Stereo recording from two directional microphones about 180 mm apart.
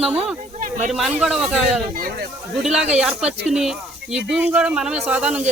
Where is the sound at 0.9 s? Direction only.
Centre (ahead or behind).